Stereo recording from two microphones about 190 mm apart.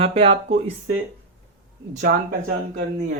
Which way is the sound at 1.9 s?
45° right (ahead or behind).